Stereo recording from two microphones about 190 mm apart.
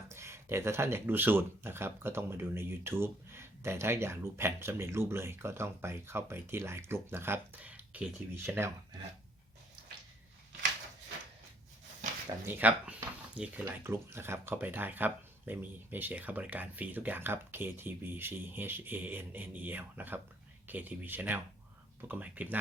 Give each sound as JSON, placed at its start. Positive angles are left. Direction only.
{"t": 0.1, "sound": "speech", "side_deg": -15}
{"t": 12.5, "sound": "speech", "side_deg": -10}